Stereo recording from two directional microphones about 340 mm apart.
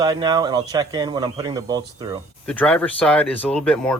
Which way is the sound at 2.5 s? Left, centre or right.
Centre.